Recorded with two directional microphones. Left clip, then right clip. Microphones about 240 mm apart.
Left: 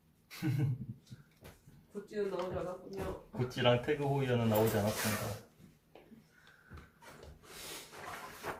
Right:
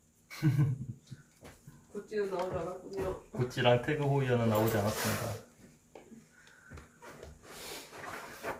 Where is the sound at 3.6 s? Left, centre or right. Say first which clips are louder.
Right 2 dB; centre.